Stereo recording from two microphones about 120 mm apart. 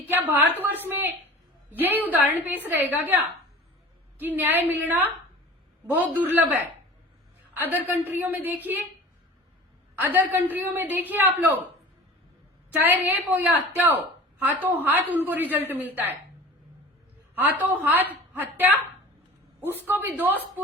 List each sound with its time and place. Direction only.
0.1 s a woman's voice: 15° right (ahead or behind)
4.2 s a woman's voice: 15° right (ahead or behind)
7.7 s a woman's voice: 15° right (ahead or behind)
10.0 s a woman's voice: 15° right (ahead or behind)
12.8 s a woman's voice: 15° right (ahead or behind)
17.3 s a woman's voice: 15° right (ahead or behind)